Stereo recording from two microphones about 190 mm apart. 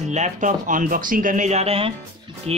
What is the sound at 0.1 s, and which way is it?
A man's voice, 40° right (ahead or behind).